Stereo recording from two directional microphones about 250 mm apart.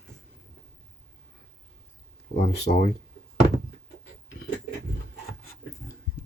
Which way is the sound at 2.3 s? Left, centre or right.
Left.